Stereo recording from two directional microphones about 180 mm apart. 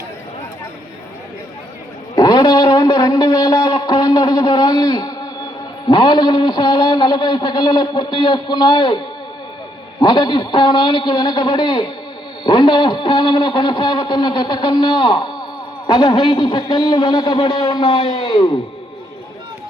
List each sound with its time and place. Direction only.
2.1 s a sound: 25° left (ahead or behind)
5.9 s a man's voice: 25° left (ahead or behind)
10.0 s a man's voice: 25° left (ahead or behind)